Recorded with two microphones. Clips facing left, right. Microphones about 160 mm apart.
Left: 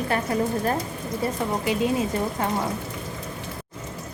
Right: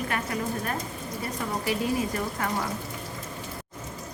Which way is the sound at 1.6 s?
20° left (ahead or behind).